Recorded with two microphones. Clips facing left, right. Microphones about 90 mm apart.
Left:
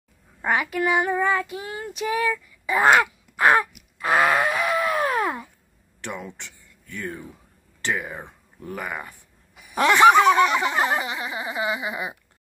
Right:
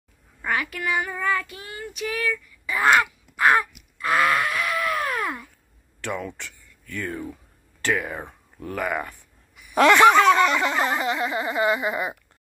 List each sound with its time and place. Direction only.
0.4 s child singing: 20° left (ahead or behind)
4.0 s groan: 25° left (ahead or behind)
5.9 s speech: 20° left (ahead or behind)
9.8 s a sound: 10° left (ahead or behind)